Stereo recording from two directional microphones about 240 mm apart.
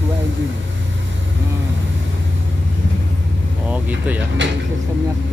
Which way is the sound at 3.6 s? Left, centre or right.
Centre.